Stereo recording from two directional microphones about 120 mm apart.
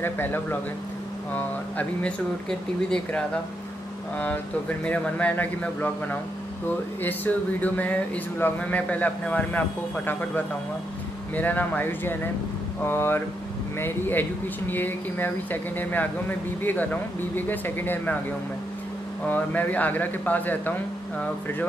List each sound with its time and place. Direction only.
0.0 s speech: 15° left (ahead or behind)
11.3 s speech: 15° left (ahead or behind)
19.2 s speech: 15° left (ahead or behind)